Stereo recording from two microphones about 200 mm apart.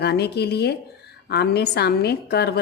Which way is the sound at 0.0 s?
55° left (ahead or behind).